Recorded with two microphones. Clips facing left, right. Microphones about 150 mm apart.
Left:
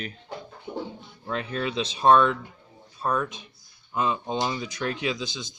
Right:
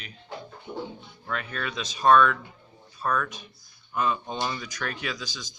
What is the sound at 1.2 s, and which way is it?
Speech, 25° left (ahead or behind).